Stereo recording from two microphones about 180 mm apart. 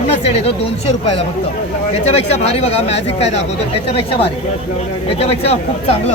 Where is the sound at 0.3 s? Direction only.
35° left (ahead or behind).